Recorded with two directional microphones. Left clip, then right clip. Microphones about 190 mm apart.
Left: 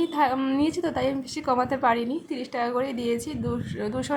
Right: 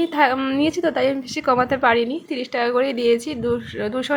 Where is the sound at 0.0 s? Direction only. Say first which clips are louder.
Right 5 dB; 15° right (ahead or behind).